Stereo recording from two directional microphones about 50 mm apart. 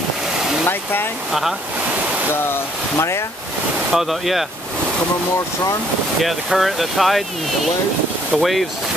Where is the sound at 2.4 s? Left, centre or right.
Left.